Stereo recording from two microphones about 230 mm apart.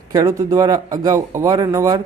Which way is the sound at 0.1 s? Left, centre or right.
Centre.